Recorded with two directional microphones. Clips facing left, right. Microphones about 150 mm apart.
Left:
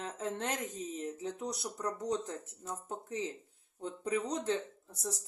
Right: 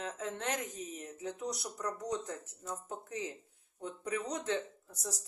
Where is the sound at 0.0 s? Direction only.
30° left (ahead or behind).